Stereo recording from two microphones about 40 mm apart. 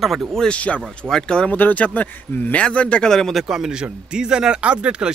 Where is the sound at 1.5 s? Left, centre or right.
Left.